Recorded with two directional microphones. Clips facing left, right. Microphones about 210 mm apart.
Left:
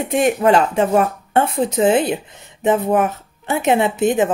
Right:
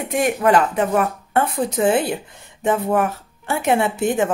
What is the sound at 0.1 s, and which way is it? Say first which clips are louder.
A woman's voice: left 2 dB; 25° left (ahead or behind).